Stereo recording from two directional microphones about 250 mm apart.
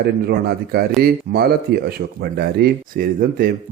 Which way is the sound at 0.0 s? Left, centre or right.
Right.